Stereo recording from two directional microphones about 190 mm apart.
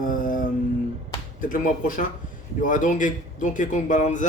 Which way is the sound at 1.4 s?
45° left (ahead or behind).